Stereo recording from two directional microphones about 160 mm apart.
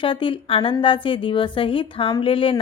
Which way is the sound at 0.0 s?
30° left (ahead or behind).